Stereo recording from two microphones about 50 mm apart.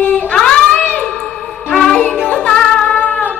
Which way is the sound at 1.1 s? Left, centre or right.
Centre.